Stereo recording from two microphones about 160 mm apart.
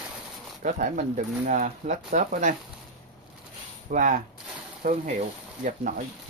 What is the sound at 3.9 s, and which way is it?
Speech, 55° right (ahead or behind).